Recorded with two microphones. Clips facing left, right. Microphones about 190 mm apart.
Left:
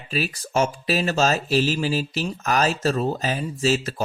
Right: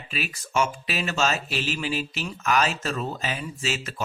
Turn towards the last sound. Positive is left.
turn(degrees=40)  # may be behind; listen again after turning